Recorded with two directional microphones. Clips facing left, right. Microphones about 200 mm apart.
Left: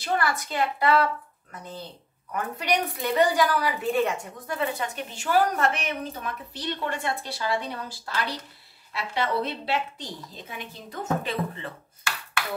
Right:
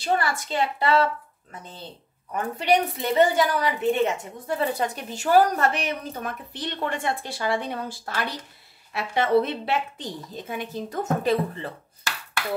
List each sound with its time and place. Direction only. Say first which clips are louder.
0.0 s a woman's voice: right 2 dB; 25° right (ahead or behind)
2.3 s a woman's voice: right 4 dB; 25° right (ahead or behind)
6.5 s a woman's voice: right 1 dB; 55° right (ahead or behind)